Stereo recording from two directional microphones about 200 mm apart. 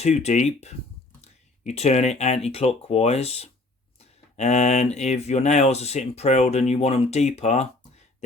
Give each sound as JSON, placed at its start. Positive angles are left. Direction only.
{"t": 0.0, "sound": "speech", "side_deg": 35}